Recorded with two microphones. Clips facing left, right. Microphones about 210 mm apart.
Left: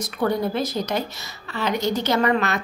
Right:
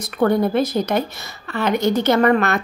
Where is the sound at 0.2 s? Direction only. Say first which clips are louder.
Right 6 dB; 55° right (ahead or behind).